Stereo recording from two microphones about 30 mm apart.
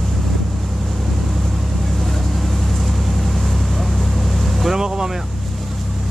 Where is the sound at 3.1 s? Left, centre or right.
Centre.